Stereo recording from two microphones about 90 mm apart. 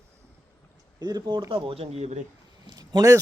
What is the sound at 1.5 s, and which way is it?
Speech, 80° right.